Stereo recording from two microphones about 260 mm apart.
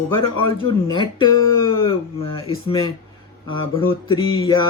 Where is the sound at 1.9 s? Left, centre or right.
Left.